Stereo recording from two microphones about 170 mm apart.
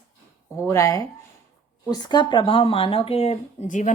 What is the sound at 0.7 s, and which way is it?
A woman's voice, 20° left (ahead or behind).